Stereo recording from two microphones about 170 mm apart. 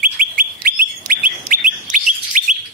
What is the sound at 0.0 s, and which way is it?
Bird, 55° right (ahead or behind).